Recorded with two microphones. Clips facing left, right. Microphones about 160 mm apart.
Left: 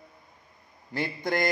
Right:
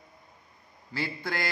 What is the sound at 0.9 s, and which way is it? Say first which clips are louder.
Speech: left 5 dB; 20° left (ahead or behind).